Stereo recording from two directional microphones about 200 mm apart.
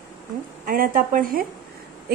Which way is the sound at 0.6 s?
45° right (ahead or behind).